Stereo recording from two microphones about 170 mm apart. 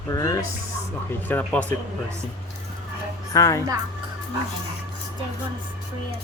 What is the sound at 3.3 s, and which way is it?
Speech, 20° left (ahead or behind).